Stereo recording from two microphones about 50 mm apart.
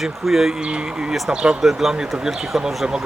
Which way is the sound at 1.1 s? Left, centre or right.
Centre.